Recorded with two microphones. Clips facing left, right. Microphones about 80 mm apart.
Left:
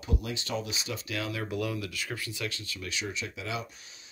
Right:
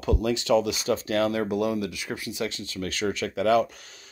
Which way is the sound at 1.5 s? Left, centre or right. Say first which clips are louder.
Right 7 dB; right.